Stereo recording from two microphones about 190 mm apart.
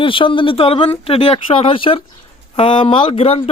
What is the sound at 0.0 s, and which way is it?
Speech, 25° left (ahead or behind).